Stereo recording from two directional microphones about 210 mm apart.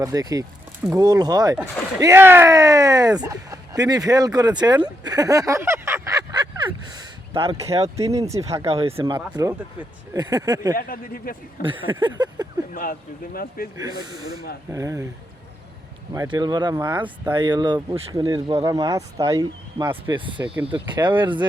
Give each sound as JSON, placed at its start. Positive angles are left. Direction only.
{"t": 0.0, "sound": "speech", "side_deg": -15}
{"t": 8.1, "sound": "speech", "side_deg": -15}
{"t": 8.6, "sound": "speech", "side_deg": -30}
{"t": 9.1, "sound": "speech", "side_deg": -15}
{"t": 10.8, "sound": "speech", "side_deg": 45}
{"t": 11.6, "sound": "speech", "side_deg": -25}
{"t": 12.7, "sound": "speech", "side_deg": 45}
{"t": 13.7, "sound": "speech", "side_deg": -20}
{"t": 16.1, "sound": "speech", "side_deg": -20}
{"t": 20.9, "sound": "speech", "side_deg": -20}